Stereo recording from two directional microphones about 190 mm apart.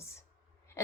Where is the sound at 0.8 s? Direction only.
15° left (ahead or behind).